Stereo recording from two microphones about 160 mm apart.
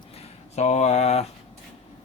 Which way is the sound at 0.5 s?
45° left (ahead or behind).